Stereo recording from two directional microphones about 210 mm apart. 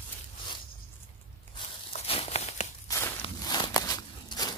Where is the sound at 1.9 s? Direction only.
30° left (ahead or behind).